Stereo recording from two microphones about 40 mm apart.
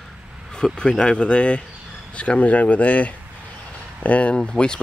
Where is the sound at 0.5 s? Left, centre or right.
Left.